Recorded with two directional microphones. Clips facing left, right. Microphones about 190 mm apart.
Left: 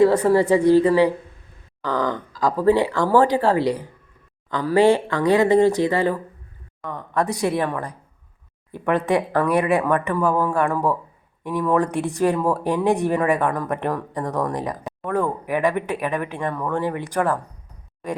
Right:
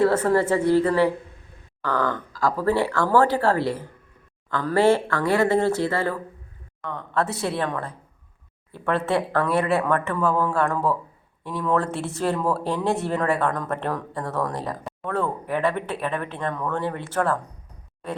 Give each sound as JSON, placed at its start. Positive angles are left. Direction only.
{"t": 0.0, "sound": "speech", "side_deg": 15}